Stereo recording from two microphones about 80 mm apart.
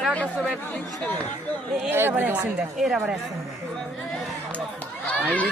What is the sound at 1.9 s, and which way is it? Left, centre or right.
Speech, right.